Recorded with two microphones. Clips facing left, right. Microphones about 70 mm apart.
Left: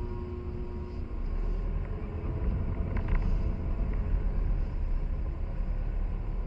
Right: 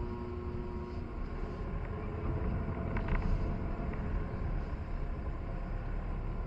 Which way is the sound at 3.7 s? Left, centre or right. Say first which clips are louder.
Even; centre.